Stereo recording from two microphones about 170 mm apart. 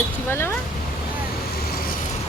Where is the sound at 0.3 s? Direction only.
15° left (ahead or behind).